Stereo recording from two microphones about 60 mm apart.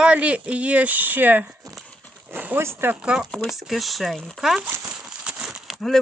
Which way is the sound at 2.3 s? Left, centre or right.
Right.